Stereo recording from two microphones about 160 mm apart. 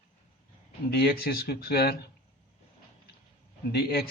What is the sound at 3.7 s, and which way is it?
Speech, 75° left (ahead or behind).